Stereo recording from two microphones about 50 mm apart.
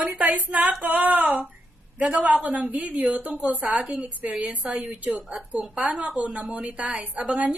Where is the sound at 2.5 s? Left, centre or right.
Right.